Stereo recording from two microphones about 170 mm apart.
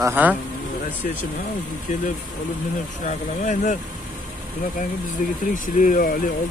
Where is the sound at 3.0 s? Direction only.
45° left (ahead or behind).